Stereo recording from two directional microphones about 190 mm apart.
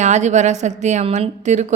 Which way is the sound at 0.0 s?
40° right (ahead or behind).